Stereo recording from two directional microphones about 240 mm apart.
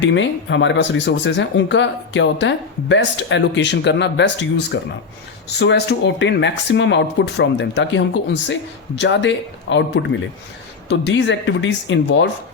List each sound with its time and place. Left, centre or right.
0.0 s speech: left